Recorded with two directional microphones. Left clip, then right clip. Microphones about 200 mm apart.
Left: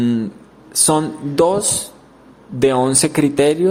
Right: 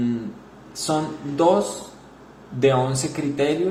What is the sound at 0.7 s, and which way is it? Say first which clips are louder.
Speech: left 7 dB; 50° left (ahead or behind).